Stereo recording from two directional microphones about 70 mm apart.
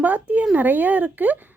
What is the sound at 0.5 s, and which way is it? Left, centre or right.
Speech, right.